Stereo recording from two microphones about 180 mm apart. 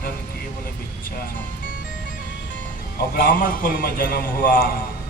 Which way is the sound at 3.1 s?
50° left (ahead or behind).